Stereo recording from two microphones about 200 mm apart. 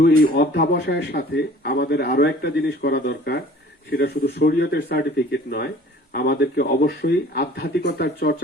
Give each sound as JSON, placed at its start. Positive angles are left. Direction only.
{"t": 0.3, "sound": "speech", "side_deg": 55}